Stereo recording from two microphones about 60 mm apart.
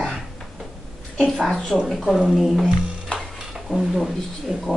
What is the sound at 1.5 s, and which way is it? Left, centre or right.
Speech, centre.